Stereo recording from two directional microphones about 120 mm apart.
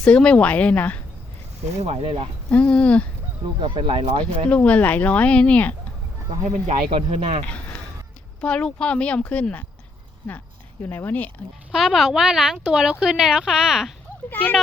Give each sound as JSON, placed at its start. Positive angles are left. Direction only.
{"t": 0.0, "sound": "speech", "side_deg": 10}
{"t": 1.8, "sound": "speech", "side_deg": -55}
{"t": 2.5, "sound": "speech", "side_deg": 10}
{"t": 3.6, "sound": "speech", "side_deg": -45}
{"t": 4.4, "sound": "speech", "side_deg": 10}
{"t": 6.4, "sound": "speech", "side_deg": -70}
{"t": 7.4, "sound": "a sound", "side_deg": 10}
{"t": 8.4, "sound": "speech", "side_deg": 10}
{"t": 10.8, "sound": "speech", "side_deg": 15}
{"t": 11.7, "sound": "speech", "side_deg": -5}
{"t": 14.3, "sound": "speech", "side_deg": 15}